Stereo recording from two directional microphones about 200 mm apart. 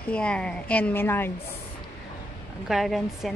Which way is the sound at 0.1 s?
5° left (ahead or behind).